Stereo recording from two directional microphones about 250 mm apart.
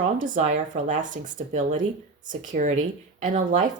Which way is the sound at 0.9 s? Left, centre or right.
Right.